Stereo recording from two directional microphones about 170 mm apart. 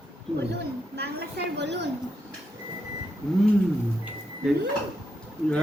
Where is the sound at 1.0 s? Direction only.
75° right (ahead or behind); by 1.9 s 90° right.